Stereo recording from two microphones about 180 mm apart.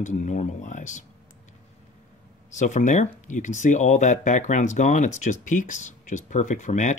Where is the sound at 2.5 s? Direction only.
45° left (ahead or behind).